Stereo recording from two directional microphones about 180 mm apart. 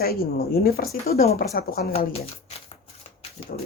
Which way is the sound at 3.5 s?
45° left (ahead or behind).